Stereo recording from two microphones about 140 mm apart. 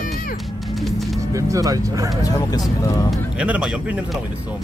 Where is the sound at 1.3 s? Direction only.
25° right (ahead or behind).